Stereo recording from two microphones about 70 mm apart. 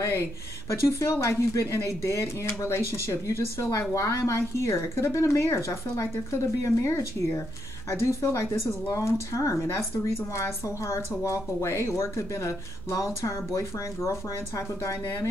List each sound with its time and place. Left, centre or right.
0.7 s speech: left
1.7 s speech: left